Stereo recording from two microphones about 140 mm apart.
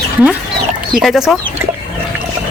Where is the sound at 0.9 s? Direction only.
5° right (ahead or behind).